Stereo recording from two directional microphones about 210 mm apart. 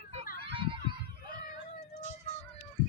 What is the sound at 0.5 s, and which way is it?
Children playing, 25° right (ahead or behind).